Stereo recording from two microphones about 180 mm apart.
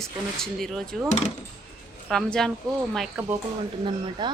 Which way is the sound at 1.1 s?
40° left (ahead or behind).